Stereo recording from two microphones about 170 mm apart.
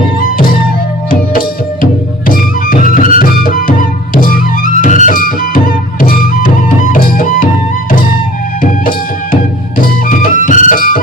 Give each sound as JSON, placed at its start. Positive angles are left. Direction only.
{"t": 0.2, "sound": "music", "side_deg": 55}
{"t": 8.6, "sound": "music", "side_deg": 55}